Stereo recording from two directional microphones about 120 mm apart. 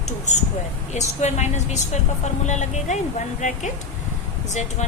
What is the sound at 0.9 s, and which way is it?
A woman's voice, 75° left (ahead or behind).